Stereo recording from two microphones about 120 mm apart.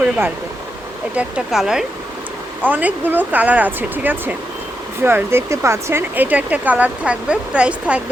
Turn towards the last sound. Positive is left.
turn(degrees=-10)  # may be behind; listen again after turning